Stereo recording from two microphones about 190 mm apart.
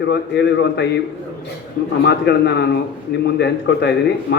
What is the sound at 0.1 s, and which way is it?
Speech, 65° left (ahead or behind).